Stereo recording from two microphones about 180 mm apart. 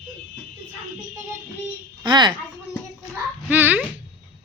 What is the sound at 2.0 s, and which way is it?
Speech, 25° right (ahead or behind).